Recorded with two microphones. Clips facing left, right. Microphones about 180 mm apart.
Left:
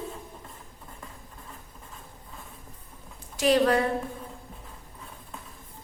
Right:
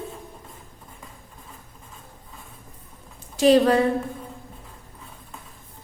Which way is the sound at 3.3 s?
25° right (ahead or behind).